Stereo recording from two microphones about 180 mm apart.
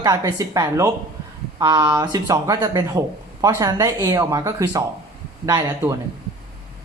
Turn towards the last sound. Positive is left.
turn(degrees=-15)  # may be behind; listen again after turning